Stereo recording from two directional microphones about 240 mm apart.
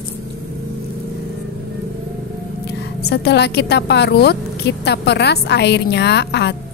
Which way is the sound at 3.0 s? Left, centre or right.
Left.